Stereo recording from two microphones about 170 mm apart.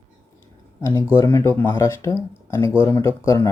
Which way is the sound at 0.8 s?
15° left (ahead or behind).